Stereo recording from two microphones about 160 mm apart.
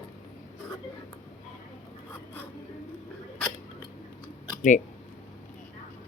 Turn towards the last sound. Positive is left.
turn(degrees=50)  # may be behind; listen again after turning